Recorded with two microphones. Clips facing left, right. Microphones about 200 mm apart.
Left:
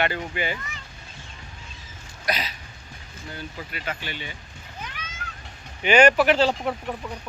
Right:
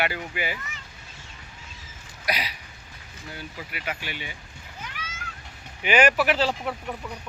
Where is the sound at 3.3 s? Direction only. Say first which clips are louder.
Left 2 dB; 10° right (ahead or behind).